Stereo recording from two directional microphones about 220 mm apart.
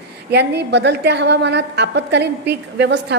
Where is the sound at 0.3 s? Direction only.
50° right (ahead or behind).